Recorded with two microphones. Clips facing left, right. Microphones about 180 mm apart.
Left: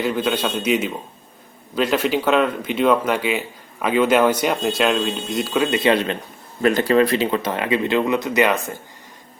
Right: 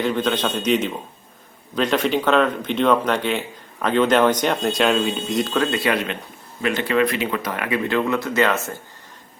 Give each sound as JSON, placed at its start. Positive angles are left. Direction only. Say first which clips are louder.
{"t": 0.0, "sound": "speech", "louder": "even", "side_deg": 10}
{"t": 5.7, "sound": "speech", "louder": "left 4 dB", "side_deg": 25}
{"t": 6.6, "sound": "speech", "louder": "left 4 dB", "side_deg": 40}